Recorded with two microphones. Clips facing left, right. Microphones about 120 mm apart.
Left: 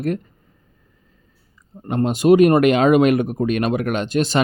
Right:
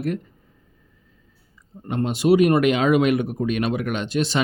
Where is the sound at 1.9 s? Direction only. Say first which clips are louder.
Left 4 dB; 45° left (ahead or behind).